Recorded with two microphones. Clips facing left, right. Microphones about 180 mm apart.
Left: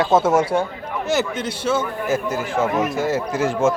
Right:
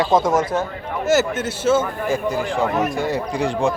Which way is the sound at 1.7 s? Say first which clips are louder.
Right 1 dB; 15° right (ahead or behind).